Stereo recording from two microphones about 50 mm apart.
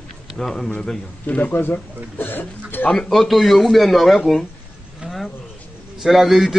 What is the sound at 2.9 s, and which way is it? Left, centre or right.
A man's voice, centre.